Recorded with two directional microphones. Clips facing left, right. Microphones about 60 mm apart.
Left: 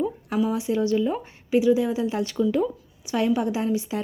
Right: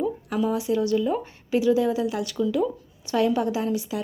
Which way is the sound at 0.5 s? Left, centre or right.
Left.